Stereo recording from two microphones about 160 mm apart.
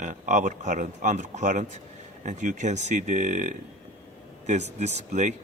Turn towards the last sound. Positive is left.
turn(degrees=-45)  # may be behind; listen again after turning